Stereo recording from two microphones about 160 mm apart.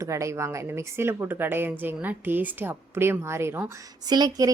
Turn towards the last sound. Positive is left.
turn(degrees=-25)  # may be behind; listen again after turning